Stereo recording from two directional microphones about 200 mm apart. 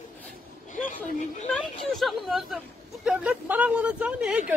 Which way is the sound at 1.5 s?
Centre (ahead or behind).